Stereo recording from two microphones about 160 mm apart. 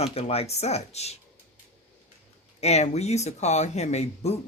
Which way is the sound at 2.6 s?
40° left (ahead or behind).